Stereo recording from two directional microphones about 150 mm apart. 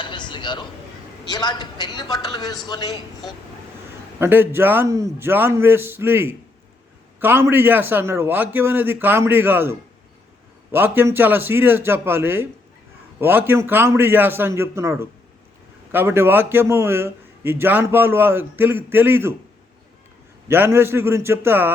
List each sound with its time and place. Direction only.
0.0 s a sound: 30° left (ahead or behind)
1.2 s a man's voice: 30° left (ahead or behind)
4.2 s a man's voice: 15° right (ahead or behind)
20.5 s a man's voice: 15° right (ahead or behind)